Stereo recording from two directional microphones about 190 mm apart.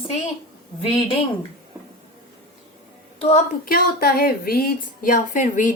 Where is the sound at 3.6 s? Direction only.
50° left (ahead or behind).